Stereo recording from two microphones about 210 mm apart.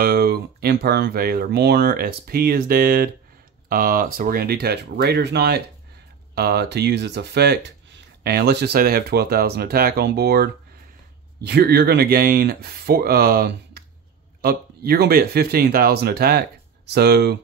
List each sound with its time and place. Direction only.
0.0 s speech: 45° right (ahead or behind)